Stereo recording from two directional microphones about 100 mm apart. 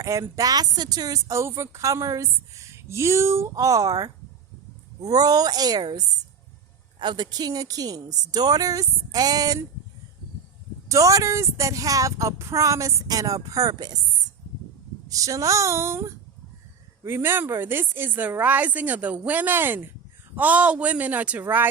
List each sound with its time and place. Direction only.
0.0 s speech: 35° right (ahead or behind)
10.8 s speech: 35° right (ahead or behind)
15.0 s speech: 35° right (ahead or behind); by 21.4 s 15° right (ahead or behind)